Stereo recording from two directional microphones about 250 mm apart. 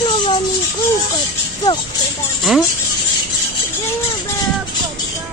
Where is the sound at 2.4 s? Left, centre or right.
Centre.